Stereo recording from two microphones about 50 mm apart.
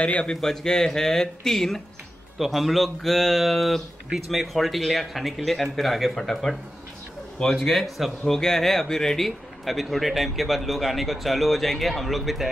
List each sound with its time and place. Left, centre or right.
0.0 s a man's voice: left
0.3 s speech: centre
7.6 s speech: centre